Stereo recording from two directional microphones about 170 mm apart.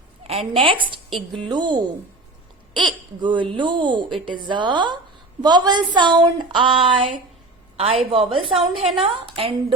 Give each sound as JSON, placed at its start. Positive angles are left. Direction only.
{"t": 0.3, "sound": "a woman's voice", "side_deg": -35}
{"t": 8.5, "sound": "a woman's voice", "side_deg": 0}
{"t": 9.1, "sound": "a woman's voice", "side_deg": -30}